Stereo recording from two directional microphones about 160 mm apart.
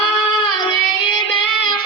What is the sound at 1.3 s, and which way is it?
Child singing, 30° left (ahead or behind).